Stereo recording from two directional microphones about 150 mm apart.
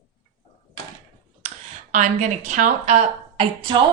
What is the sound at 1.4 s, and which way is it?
Speech, 55° right (ahead or behind).